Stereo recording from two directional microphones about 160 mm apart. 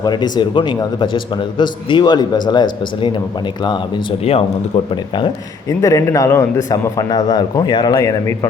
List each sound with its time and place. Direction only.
0.0 s a man's voice: 25° left (ahead or behind)
4.2 s speech: 40° left (ahead or behind)
5.1 s a man's voice: 25° left (ahead or behind)